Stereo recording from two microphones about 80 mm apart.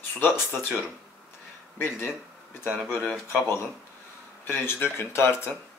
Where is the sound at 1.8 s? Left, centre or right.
Left.